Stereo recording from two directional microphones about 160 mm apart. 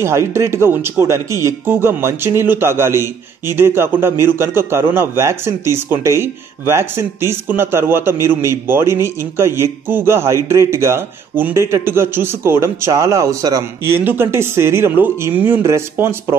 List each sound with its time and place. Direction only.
0.0 s speech: 15° right (ahead or behind)